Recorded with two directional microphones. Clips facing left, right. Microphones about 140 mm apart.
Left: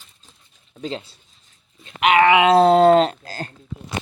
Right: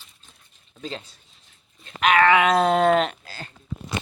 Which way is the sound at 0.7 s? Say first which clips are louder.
Left 5 dB; 25° left (ahead or behind).